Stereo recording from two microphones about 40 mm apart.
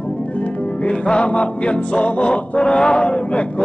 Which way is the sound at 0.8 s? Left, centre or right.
Left.